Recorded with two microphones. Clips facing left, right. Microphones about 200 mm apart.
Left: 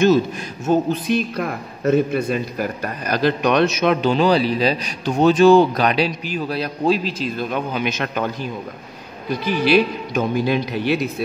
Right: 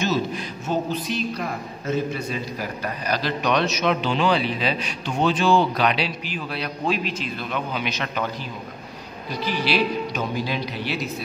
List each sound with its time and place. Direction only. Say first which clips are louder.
0.7 s a man's voice: left 7 dB; 50° left (ahead or behind)
9.3 s a man's voice: left 7 dB; 50° left (ahead or behind)